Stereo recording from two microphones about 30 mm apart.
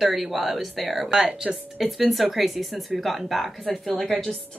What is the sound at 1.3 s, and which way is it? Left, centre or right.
Speech, right.